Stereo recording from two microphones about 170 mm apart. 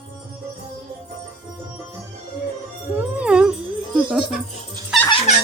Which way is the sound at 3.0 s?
5° right (ahead or behind).